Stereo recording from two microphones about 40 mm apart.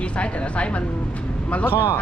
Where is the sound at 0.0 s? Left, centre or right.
Left.